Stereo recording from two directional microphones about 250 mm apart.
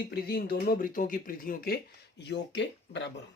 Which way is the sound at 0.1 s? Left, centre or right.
Left.